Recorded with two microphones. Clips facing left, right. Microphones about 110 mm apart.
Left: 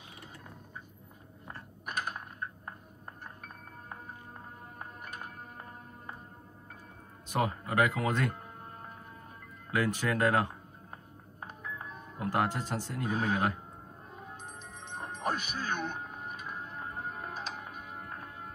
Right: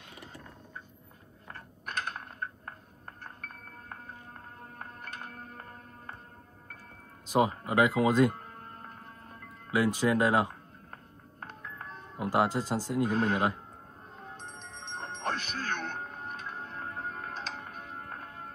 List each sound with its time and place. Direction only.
1.5 s mechanisms: 10° left (ahead or behind)
4.7 s music: 10° left (ahead or behind)
7.3 s speech: 15° right (ahead or behind)
9.7 s speech: 10° right (ahead or behind)
11.4 s music: 10° left (ahead or behind)
12.2 s speech: 10° right (ahead or behind)
13.1 s speech: 10° left (ahead or behind)
14.1 s music: 5° left (ahead or behind)